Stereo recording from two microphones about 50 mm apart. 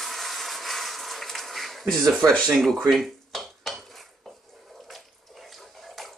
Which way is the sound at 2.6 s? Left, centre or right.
Centre.